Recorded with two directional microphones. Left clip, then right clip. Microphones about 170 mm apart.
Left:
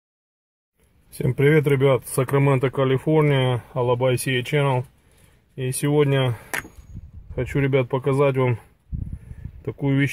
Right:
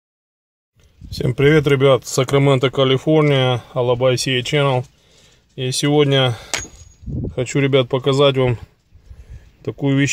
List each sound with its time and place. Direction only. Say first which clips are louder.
1.1 s speech: right 4 dB; 10° right (ahead or behind)